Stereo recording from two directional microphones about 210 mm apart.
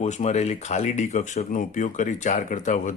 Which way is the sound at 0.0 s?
35° left (ahead or behind).